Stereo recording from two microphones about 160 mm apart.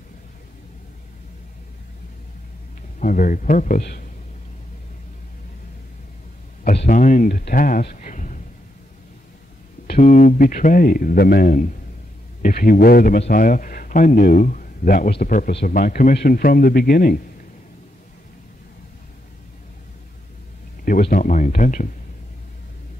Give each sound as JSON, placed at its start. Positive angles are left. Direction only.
{"t": 3.0, "sound": "a man's voice", "side_deg": 60}
{"t": 3.8, "sound": "speech", "side_deg": 80}
{"t": 6.9, "sound": "a man's voice", "side_deg": 55}
{"t": 9.8, "sound": "a man's voice", "side_deg": 50}
{"t": 20.8, "sound": "speech", "side_deg": 60}